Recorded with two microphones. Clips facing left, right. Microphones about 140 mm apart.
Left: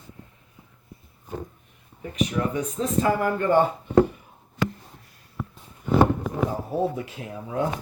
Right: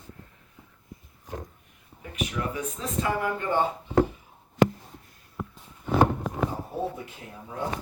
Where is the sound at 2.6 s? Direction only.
40° left (ahead or behind).